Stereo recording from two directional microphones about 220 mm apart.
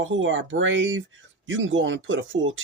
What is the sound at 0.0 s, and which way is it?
Speech, 60° right (ahead or behind).